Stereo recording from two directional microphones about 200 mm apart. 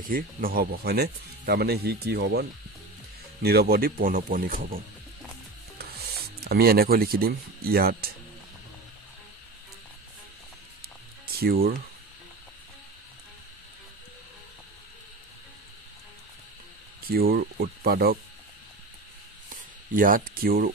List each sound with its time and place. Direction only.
0.0 s speech: 45° right (ahead or behind)
3.4 s speech: 50° right (ahead or behind)
11.2 s music: 50° right (ahead or behind)
17.0 s speech: 50° right (ahead or behind)
19.9 s speech: 45° right (ahead or behind)